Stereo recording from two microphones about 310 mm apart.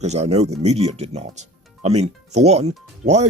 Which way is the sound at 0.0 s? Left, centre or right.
Right.